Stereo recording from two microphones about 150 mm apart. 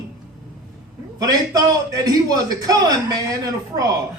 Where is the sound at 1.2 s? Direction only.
25° right (ahead or behind).